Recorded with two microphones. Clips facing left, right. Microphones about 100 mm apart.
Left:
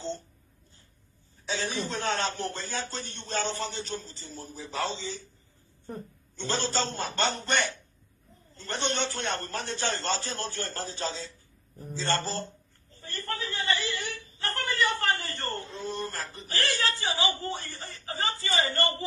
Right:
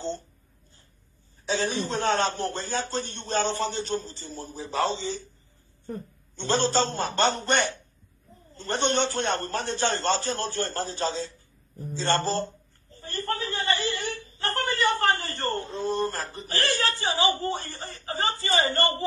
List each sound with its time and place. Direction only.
1.5 s a man's voice: 40° right (ahead or behind)
6.4 s speech: 40° right (ahead or behind)
8.5 s speech: 50° right (ahead or behind)
13.0 s whimper: 40° right (ahead or behind)
16.2 s speech: 35° right (ahead or behind)